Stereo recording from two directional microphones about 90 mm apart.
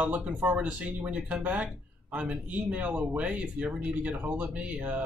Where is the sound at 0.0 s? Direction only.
10° right (ahead or behind).